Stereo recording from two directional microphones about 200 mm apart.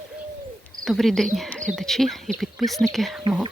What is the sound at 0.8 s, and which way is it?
Speech, centre (ahead or behind).